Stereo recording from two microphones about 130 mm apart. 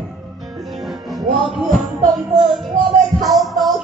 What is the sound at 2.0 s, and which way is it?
Music, 35° right (ahead or behind).